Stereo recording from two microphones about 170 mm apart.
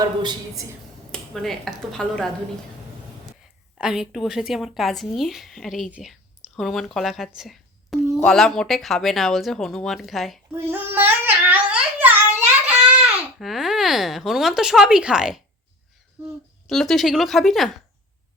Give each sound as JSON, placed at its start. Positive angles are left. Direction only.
{"t": 0.0, "sound": "a woman's voice", "side_deg": -25}
{"t": 1.1, "sound": "speech", "side_deg": 0}
{"t": 3.8, "sound": "speech", "side_deg": -5}
{"t": 10.7, "sound": "a sound", "side_deg": -10}
{"t": 12.6, "sound": "speech", "side_deg": -5}
{"t": 16.6, "sound": "speech", "side_deg": 0}